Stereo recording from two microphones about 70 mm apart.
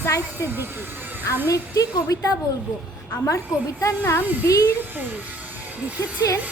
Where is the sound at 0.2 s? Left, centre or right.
Right.